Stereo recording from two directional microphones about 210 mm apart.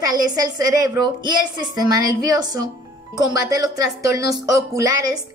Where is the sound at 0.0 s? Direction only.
20° right (ahead or behind).